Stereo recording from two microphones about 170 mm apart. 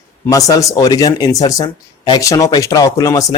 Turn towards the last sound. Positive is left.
turn(degrees=20)  # may be behind; listen again after turning